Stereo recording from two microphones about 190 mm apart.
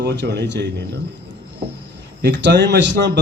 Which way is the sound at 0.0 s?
65° right (ahead or behind).